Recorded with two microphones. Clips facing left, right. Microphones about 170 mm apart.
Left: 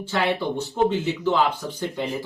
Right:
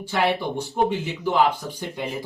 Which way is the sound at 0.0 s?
15° right (ahead or behind).